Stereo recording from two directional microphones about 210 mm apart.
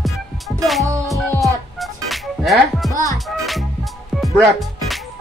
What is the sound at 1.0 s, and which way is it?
Music, centre (ahead or behind).